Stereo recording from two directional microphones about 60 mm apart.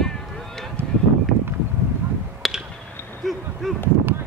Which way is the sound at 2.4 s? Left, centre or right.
Centre.